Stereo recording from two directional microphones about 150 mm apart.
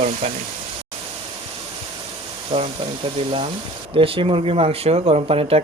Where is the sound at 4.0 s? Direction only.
35° right (ahead or behind).